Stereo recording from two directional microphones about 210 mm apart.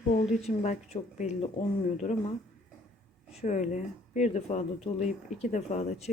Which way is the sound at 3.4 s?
35° left (ahead or behind).